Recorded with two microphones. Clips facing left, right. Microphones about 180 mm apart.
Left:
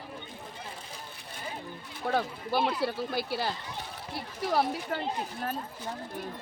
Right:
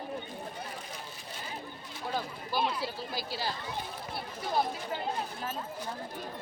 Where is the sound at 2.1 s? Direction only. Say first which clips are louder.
Left 6 dB; 65° left (ahead or behind).